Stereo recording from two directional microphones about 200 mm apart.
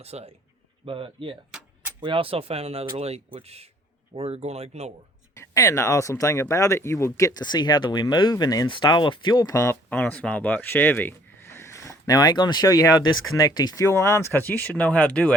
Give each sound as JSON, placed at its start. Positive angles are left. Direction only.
{"t": 0.0, "sound": "speech", "side_deg": -30}
{"t": 5.3, "sound": "speech", "side_deg": 15}